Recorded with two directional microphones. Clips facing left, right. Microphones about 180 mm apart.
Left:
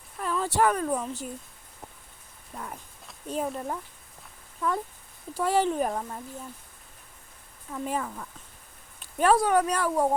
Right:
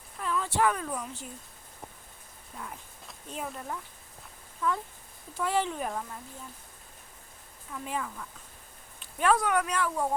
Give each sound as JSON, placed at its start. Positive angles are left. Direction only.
{"t": 0.2, "sound": "speech", "side_deg": 40}
{"t": 3.2, "sound": "speech", "side_deg": 40}
{"t": 5.4, "sound": "speech", "side_deg": 40}
{"t": 7.7, "sound": "speech", "side_deg": 40}